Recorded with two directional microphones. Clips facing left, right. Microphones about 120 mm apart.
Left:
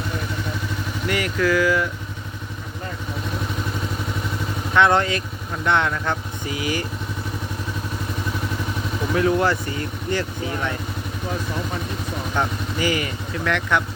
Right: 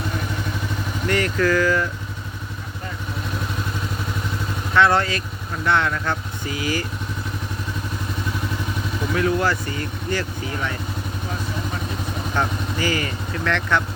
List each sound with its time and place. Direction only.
1.0 s speech: 10° left (ahead or behind)
4.7 s speech: 20° left (ahead or behind)
9.1 s speech: 25° left (ahead or behind)
12.4 s speech: 20° left (ahead or behind)